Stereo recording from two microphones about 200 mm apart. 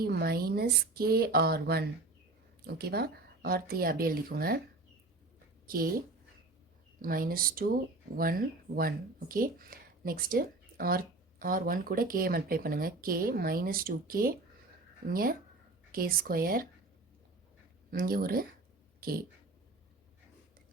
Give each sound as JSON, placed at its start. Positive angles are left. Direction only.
{"t": 0.0, "sound": "speech", "side_deg": -50}
{"t": 5.6, "sound": "speech", "side_deg": -45}
{"t": 7.0, "sound": "speech", "side_deg": -45}
{"t": 17.9, "sound": "speech", "side_deg": -45}
{"t": 18.9, "sound": "a sound", "side_deg": -45}